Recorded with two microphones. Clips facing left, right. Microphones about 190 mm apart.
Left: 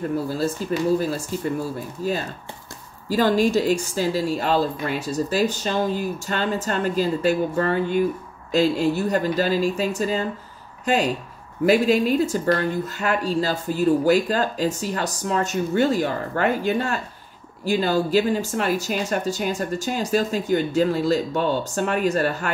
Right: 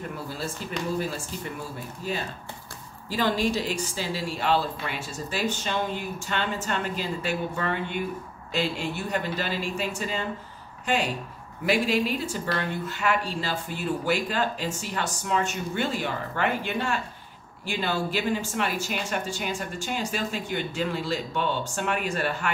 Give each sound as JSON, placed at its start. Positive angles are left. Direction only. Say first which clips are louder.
{"t": 0.1, "sound": "a woman's voice", "louder": "left 10 dB", "side_deg": 40}
{"t": 11.6, "sound": "speech", "louder": "left 7 dB", "side_deg": 40}